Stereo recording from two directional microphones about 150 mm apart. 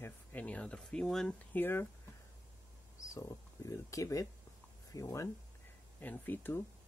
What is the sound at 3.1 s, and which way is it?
Speech, 20° left (ahead or behind).